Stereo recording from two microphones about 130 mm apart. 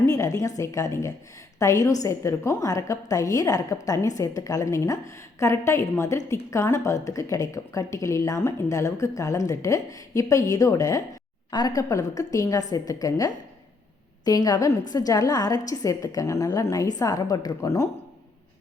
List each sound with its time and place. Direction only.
0.0 s a woman's voice: 25° left (ahead or behind)